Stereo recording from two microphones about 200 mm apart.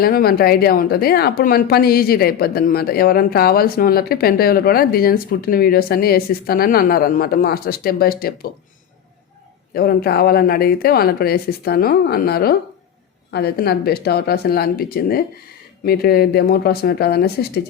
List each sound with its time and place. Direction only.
0.0 s speech: 50° left (ahead or behind)
9.7 s speech: 50° left (ahead or behind)